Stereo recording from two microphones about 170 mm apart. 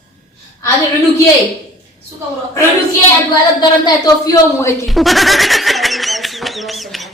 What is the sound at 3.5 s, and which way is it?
Speech, 25° left (ahead or behind).